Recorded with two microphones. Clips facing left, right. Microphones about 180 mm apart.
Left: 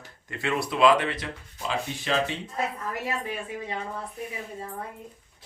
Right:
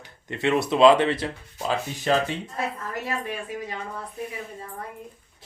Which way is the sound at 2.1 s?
40° right (ahead or behind).